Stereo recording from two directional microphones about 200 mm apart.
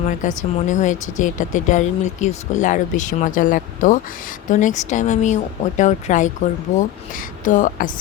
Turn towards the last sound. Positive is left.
turn(degrees=40)  # may be behind; listen again after turning